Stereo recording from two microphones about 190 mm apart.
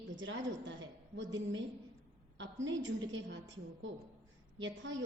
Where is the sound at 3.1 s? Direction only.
70° right (ahead or behind).